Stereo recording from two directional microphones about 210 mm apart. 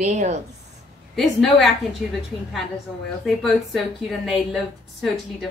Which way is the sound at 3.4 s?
Centre (ahead or behind).